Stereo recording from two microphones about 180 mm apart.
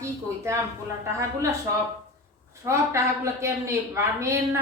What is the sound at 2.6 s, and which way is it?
A woman's voice, 15° right (ahead or behind).